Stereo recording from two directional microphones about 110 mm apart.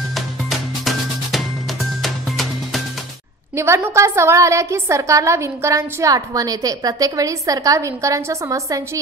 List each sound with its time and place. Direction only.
0.1 s music: centre (ahead or behind)
3.5 s a woman's voice: 25° right (ahead or behind)